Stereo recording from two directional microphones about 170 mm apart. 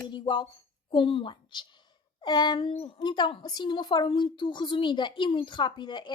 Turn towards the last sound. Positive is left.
turn(degrees=25)  # may be behind; listen again after turning